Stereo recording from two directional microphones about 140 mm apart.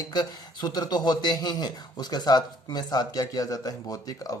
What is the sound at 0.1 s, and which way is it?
Speech, 30° left (ahead or behind).